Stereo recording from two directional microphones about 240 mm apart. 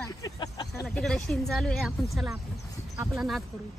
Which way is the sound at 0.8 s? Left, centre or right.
Centre.